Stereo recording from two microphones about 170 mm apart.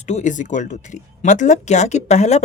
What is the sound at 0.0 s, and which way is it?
Speech, 45° left (ahead or behind).